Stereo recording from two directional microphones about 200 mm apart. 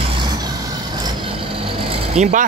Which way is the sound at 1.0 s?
25° right (ahead or behind).